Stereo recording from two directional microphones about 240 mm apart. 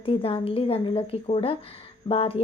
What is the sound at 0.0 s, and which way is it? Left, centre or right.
A woman's voice, left.